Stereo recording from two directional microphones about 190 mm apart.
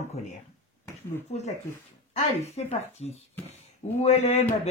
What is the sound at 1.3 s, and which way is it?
Speech, 35° left (ahead or behind).